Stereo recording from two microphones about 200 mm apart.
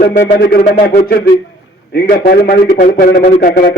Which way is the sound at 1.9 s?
50° left (ahead or behind).